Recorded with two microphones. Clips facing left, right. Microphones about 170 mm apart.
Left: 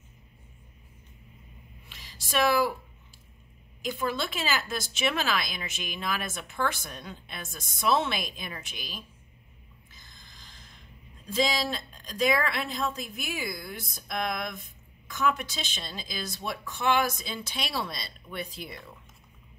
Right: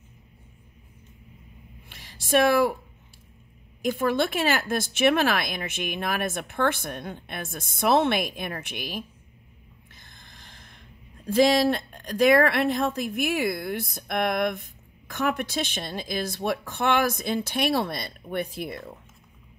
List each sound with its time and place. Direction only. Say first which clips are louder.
1.9 s a sound: right 12 dB; 50° right (ahead or behind)
3.8 s a woman's voice: right 7 dB; 55° right (ahead or behind)
9.9 s snort: right 2 dB; 60° right (ahead or behind)
11.2 s a woman's voice: right 9 dB; 60° right (ahead or behind)